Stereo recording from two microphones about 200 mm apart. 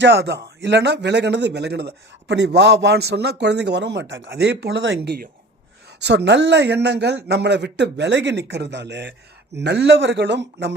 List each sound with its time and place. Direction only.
0.0 s a man's voice: 60° right (ahead or behind)
5.0 s speech: 50° right (ahead or behind)
6.1 s a man's voice: 60° right (ahead or behind)